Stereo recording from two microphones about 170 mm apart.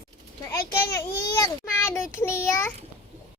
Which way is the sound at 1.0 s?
15° left (ahead or behind).